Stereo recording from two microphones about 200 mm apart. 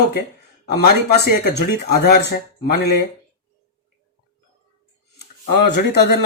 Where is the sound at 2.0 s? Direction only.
55° left (ahead or behind).